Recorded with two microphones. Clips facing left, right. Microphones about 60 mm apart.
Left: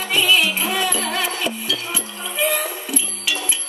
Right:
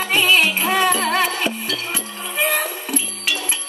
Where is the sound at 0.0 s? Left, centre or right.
Right.